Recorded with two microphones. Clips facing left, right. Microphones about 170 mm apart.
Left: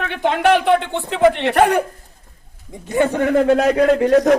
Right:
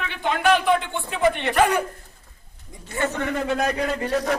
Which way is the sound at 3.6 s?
80° left.